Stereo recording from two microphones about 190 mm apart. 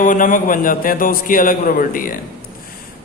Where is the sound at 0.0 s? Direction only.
45° left (ahead or behind).